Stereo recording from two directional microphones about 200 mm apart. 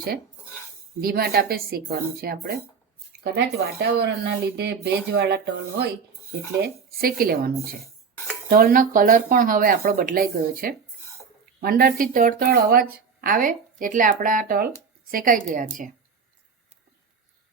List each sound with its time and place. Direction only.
1.0 s speech: 50° right (ahead or behind)
6.6 s a woman's voice: 45° right (ahead or behind)